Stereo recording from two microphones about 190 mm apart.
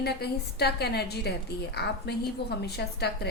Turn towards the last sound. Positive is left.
turn(degrees=60)  # may be behind; listen again after turning